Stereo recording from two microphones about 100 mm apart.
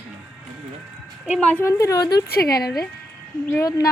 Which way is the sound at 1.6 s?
35° left (ahead or behind).